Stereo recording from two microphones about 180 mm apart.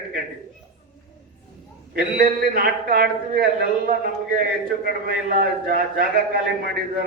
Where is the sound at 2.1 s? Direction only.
55° right (ahead or behind).